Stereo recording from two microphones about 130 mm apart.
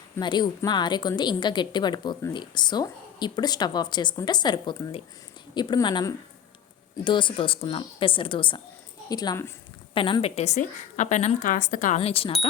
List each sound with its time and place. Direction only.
0.2 s a woman's voice: 35° left (ahead or behind)
9.0 s speech: 30° left (ahead or behind)
9.9 s a woman's voice: 45° left (ahead or behind); by 11.9 s 85° left
11.9 s speech: 50° left (ahead or behind)